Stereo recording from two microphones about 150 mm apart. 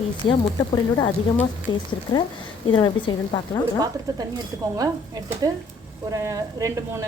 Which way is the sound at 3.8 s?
25° right (ahead or behind).